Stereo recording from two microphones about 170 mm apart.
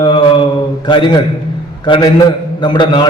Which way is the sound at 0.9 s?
30° left (ahead or behind).